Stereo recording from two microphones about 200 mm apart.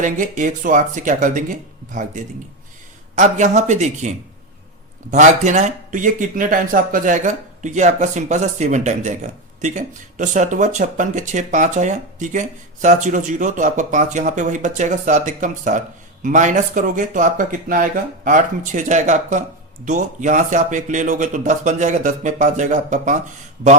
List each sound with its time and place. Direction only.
0.0 s speech: 40° right (ahead or behind)